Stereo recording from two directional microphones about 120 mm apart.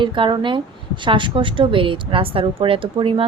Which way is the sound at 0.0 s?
40° right (ahead or behind).